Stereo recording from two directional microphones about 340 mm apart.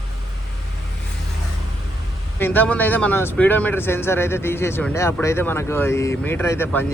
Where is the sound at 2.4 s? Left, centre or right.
Centre.